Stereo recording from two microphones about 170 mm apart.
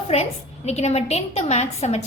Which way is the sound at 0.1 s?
40° left (ahead or behind).